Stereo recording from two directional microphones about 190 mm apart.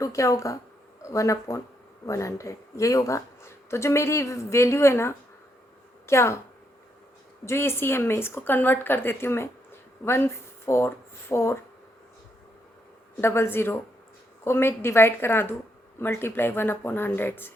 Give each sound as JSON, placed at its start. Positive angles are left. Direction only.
{"t": 0.0, "sound": "speech", "side_deg": 15}
{"t": 7.4, "sound": "speech", "side_deg": 15}
{"t": 13.2, "sound": "speech", "side_deg": 10}